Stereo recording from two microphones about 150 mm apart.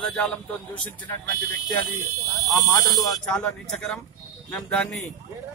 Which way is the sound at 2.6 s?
25° left (ahead or behind).